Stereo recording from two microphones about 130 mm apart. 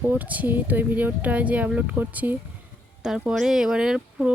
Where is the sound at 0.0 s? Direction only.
15° right (ahead or behind).